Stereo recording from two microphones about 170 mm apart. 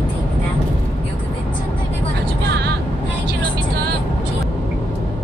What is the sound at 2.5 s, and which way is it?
Vehicle, 80° right.